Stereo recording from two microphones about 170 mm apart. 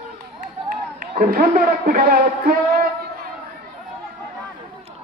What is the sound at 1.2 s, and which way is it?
A man's voice, 55° right (ahead or behind).